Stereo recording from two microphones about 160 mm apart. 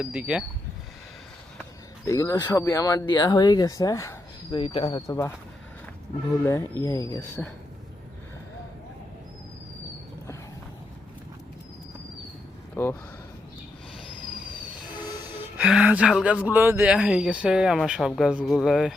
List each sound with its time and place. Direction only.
0.0 s speech: 5° right (ahead or behind)
2.0 s speech: 20° left (ahead or behind)
4.5 s speech: 35° left (ahead or behind)
5.0 s speech: 20° left (ahead or behind)
6.8 s speech: 20° left (ahead or behind)
12.7 s speech: 15° left (ahead or behind)
15.4 s speech: 5° right (ahead or behind)